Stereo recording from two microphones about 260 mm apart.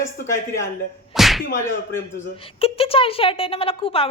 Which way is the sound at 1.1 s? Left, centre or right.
Centre.